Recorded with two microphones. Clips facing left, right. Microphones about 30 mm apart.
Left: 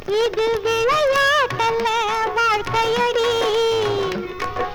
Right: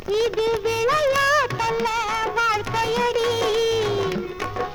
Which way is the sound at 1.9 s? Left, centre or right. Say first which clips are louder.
Left 4 dB; left.